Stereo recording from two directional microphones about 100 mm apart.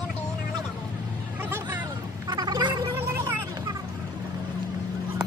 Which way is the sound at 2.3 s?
45° right (ahead or behind).